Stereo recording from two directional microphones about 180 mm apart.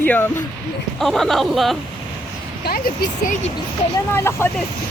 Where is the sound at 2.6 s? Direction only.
60° left (ahead or behind).